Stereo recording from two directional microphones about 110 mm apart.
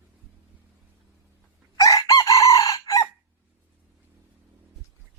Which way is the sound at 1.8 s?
35° left (ahead or behind).